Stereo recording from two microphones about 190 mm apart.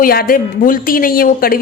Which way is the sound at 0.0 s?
50° left (ahead or behind).